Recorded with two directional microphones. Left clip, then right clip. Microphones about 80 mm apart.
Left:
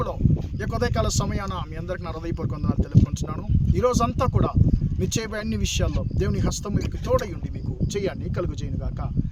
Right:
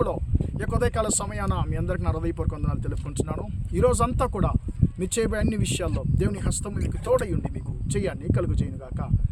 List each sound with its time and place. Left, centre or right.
0.6 s speech: right